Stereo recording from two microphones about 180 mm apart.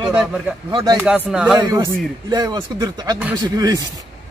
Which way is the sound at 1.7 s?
20° right (ahead or behind).